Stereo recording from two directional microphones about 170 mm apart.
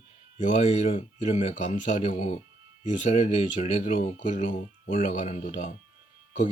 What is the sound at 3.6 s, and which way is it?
Speech, 45° left (ahead or behind).